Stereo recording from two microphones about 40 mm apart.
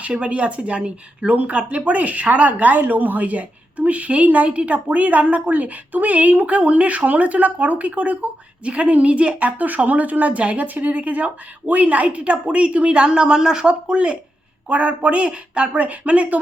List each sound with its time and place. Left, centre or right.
0.2 s a woman's voice: right
9.6 s a woman's voice: right